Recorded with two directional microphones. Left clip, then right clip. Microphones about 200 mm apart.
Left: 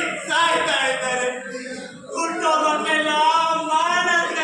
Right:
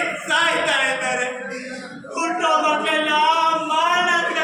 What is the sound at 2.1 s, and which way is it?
Singing, 20° right (ahead or behind).